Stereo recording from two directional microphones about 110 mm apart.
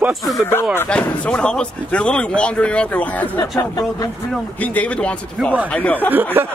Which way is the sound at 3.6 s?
30° left (ahead or behind).